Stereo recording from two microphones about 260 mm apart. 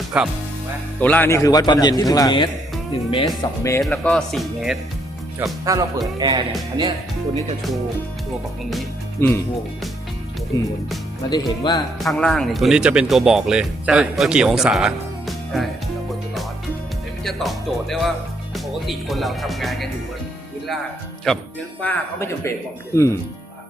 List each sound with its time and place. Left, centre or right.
0.1 s a man's voice: centre
5.4 s speech: centre
9.2 s a man's voice: centre
10.5 s a man's voice: centre
11.9 s speech: centre
17.2 s speech: centre
21.3 s a man's voice: centre